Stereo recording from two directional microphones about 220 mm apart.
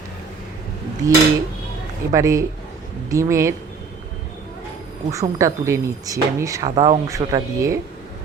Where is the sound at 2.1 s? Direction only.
15° right (ahead or behind).